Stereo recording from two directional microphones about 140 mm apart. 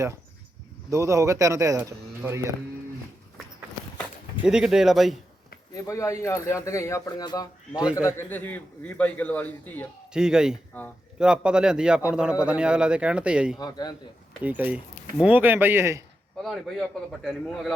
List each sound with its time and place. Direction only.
0.9 s speech: 20° right (ahead or behind)
4.4 s a man's voice: 5° right (ahead or behind)
5.7 s speech: 20° left (ahead or behind)
7.8 s speech: 5° right (ahead or behind)
8.0 s a man's voice: 15° left (ahead or behind)
10.1 s a man's voice: 5° right (ahead or behind)
13.6 s speech: 30° left (ahead or behind)
14.4 s speech: 10° right (ahead or behind)
16.4 s a man's voice: centre (ahead or behind)